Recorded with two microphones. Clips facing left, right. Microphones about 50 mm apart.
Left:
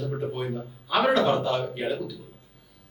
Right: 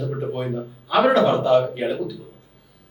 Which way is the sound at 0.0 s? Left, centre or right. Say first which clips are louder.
Right 4 dB; centre.